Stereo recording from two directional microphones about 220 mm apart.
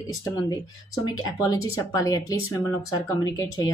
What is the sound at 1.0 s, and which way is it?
Speech, 15° left (ahead or behind).